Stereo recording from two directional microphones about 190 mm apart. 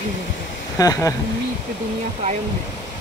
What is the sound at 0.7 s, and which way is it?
Speech, 20° left (ahead or behind).